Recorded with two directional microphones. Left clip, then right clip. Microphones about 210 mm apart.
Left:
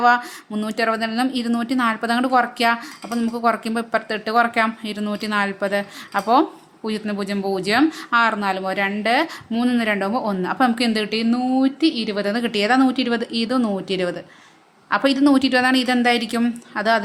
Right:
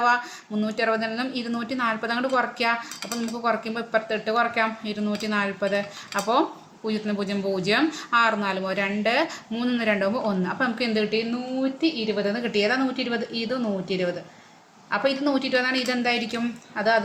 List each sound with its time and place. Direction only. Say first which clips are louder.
0.0 s a woman's voice: left 5 dB; 40° left (ahead or behind)